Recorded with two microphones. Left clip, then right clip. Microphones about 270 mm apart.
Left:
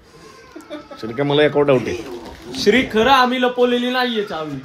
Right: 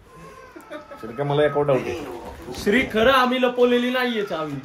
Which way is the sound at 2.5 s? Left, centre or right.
Left.